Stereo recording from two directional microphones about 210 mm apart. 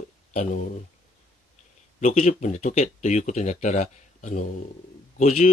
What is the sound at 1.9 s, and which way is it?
Speech, 35° left (ahead or behind).